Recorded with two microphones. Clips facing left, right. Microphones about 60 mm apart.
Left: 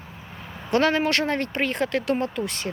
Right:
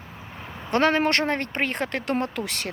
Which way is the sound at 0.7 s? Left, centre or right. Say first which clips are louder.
Even; right.